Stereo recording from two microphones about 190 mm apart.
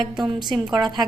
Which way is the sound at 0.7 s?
20° right (ahead or behind).